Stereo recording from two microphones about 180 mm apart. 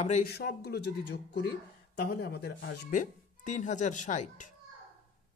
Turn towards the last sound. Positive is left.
turn(degrees=45)  # may be behind; listen again after turning